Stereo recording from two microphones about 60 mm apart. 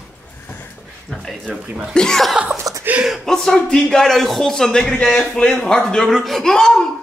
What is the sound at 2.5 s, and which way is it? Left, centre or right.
Chuckle, right.